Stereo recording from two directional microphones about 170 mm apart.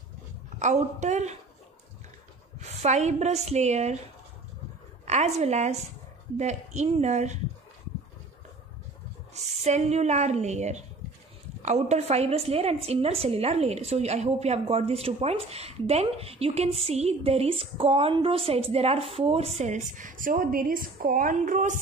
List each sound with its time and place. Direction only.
0.6 s a woman's voice: 45° right (ahead or behind)
2.6 s a woman's voice: 40° right (ahead or behind)
5.0 s a woman's voice: 40° right (ahead or behind)
9.3 s a woman's voice: 40° right (ahead or behind)